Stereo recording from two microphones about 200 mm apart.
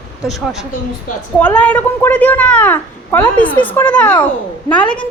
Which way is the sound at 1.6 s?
5° left (ahead or behind).